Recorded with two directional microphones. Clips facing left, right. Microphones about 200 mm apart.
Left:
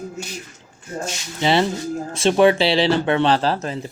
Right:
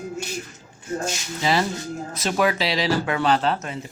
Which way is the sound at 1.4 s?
25° left (ahead or behind).